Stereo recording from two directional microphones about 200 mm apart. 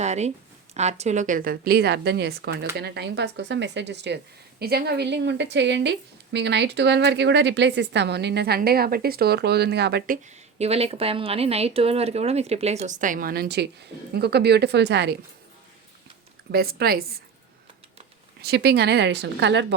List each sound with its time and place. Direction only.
0.0 s a woman's voice: 35° right (ahead or behind); by 10.2 s 55° right (ahead or behind)
10.2 s speech: 30° right (ahead or behind); by 15.1 s 60° right (ahead or behind)
16.5 s speech: 50° right (ahead or behind)
18.4 s a woman's voice: 55° right (ahead or behind)